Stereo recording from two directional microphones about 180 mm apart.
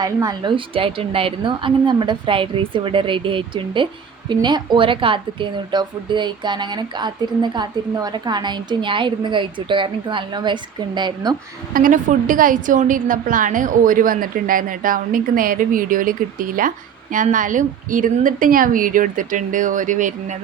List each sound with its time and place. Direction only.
0.0 s a woman's voice: 20° right (ahead or behind)
11.7 s a woman's voice: 50° right (ahead or behind)